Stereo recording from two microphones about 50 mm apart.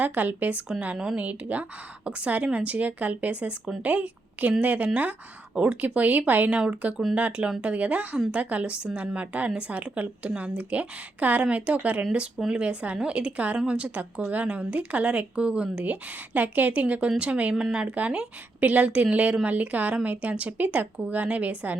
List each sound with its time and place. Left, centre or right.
0.0 s a woman's voice: right
17.5 s speech: centre
18.6 s speech: right